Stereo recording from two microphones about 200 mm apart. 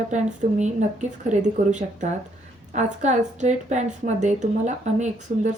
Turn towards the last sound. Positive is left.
turn(degrees=-35)  # may be behind; listen again after turning